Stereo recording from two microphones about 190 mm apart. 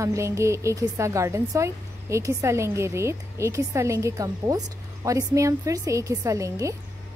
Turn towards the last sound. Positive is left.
turn(degrees=-15)  # may be behind; listen again after turning